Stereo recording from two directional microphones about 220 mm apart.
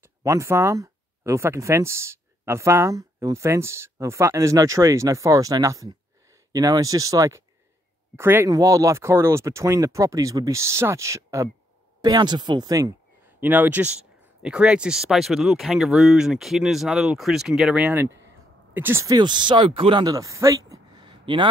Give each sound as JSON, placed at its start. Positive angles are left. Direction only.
{"t": 0.0, "sound": "speech", "side_deg": -15}